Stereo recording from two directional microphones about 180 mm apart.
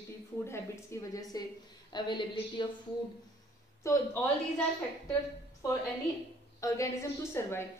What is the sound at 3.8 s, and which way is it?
Speech, 15° left (ahead or behind).